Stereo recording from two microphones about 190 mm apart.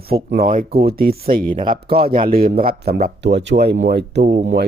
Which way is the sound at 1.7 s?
55° right (ahead or behind).